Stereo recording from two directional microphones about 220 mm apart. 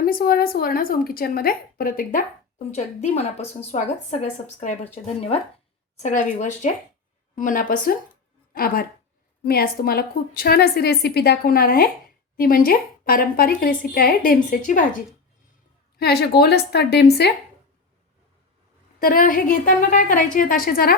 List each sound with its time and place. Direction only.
0.0 s a woman's voice: 45° left (ahead or behind)
2.7 s a woman's voice: 30° left (ahead or behind)
16.0 s a woman's voice: 45° left (ahead or behind)
18.9 s a woman's voice: 40° left (ahead or behind)